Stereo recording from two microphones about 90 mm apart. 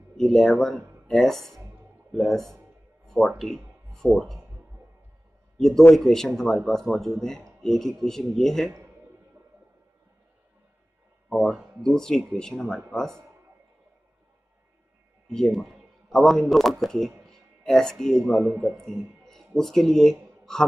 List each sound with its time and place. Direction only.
0.2 s speech: 5° left (ahead or behind)
5.6 s speech: 5° left (ahead or behind)
11.8 s speech: 5° left (ahead or behind)
15.3 s speech: centre (ahead or behind)
17.3 s music: 5° left (ahead or behind)
18.7 s speech: 30° right (ahead or behind)
19.2 s a sound: 5° left (ahead or behind)